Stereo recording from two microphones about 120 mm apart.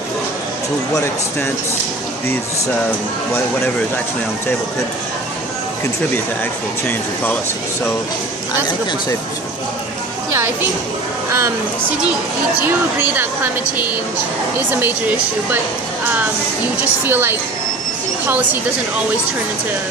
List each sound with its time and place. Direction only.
10.3 s speech: 20° right (ahead or behind)
12.6 s a woman's voice: 15° right (ahead or behind)
16.7 s a woman's voice: 15° right (ahead or behind)